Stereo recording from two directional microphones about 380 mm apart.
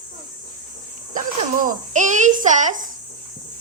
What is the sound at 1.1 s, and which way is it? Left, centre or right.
A child's voice, right.